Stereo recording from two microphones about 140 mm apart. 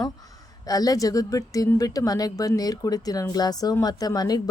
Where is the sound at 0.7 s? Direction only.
25° left (ahead or behind).